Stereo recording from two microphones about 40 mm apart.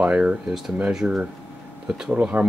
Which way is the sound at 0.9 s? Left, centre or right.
Centre.